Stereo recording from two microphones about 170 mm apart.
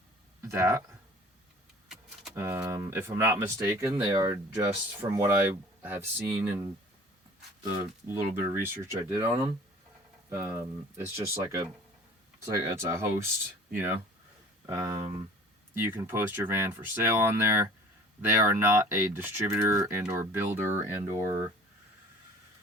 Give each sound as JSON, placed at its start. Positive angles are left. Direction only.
{"t": 0.4, "sound": "speech", "side_deg": -15}
{"t": 2.3, "sound": "speech", "side_deg": -15}
{"t": 8.0, "sound": "speech", "side_deg": -15}